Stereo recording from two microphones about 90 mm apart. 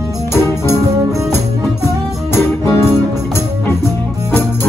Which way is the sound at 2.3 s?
30° left (ahead or behind).